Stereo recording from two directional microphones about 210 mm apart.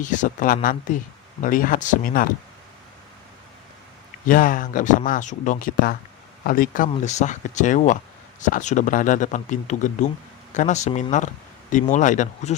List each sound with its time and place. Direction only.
0.0 s speech: 35° left (ahead or behind)
4.3 s speech: 40° left (ahead or behind)